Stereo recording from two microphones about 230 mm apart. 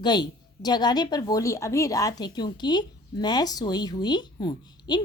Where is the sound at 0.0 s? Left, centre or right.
Centre.